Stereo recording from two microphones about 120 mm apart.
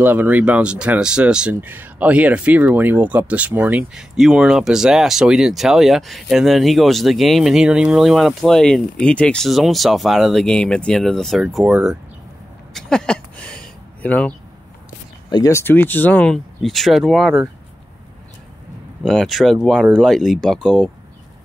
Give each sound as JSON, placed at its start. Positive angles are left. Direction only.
{"t": 0.0, "sound": "speech", "side_deg": -15}
{"t": 11.4, "sound": "speech", "side_deg": -10}
{"t": 12.7, "sound": "a sound", "side_deg": 5}
{"t": 15.2, "sound": "speech", "side_deg": 35}
{"t": 15.5, "sound": "speech", "side_deg": 15}
{"t": 19.0, "sound": "speech", "side_deg": 0}